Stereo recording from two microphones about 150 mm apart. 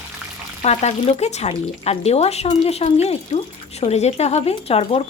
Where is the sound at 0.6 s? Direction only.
45° left (ahead or behind).